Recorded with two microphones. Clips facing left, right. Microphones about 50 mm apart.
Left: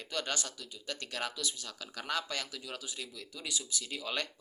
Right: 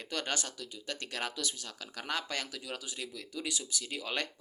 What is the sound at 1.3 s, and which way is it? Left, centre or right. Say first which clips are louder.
Speech: right 1 dB; right.